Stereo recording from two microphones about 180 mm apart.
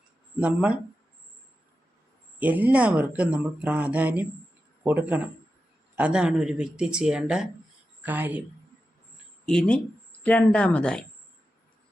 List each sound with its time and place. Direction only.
0.3 s speech: 10° right (ahead or behind)
2.4 s speech: 10° right (ahead or behind)
9.5 s speech: 5° left (ahead or behind)